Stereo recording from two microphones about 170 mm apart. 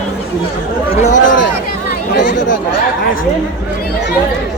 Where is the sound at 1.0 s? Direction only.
45° left (ahead or behind).